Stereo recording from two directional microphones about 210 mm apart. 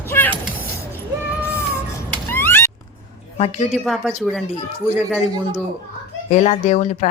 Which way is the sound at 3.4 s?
30° left (ahead or behind).